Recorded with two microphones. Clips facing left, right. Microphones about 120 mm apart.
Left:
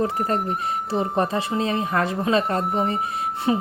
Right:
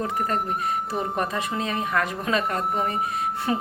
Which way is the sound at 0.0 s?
30° left (ahead or behind).